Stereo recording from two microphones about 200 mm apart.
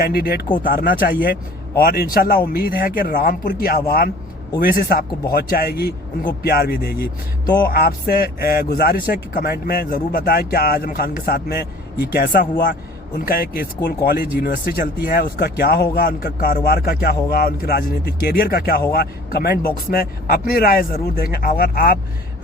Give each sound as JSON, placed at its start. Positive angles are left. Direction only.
{"t": 0.0, "sound": "speech", "side_deg": 50}